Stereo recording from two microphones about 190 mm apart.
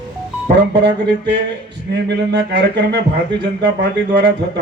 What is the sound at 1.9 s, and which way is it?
A man's voice, 65° right (ahead or behind).